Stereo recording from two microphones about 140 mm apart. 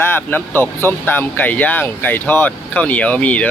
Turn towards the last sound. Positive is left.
turn(degrees=10)  # may be behind; listen again after turning